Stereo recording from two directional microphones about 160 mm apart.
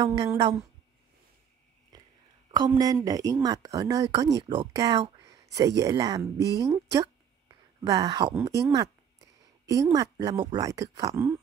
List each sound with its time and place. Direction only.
0.0 s speech: 25° right (ahead or behind)
1.9 s chewing: 25° right (ahead or behind)
2.5 s speech: 25° right (ahead or behind)
5.2 s a sound: 20° right (ahead or behind)
5.8 s speech: 20° right (ahead or behind)
6.6 s a sound: 20° right (ahead or behind)
8.4 s speech: 20° right (ahead or behind)
8.7 s a sound: 20° right (ahead or behind)
9.9 s speech: 25° right (ahead or behind)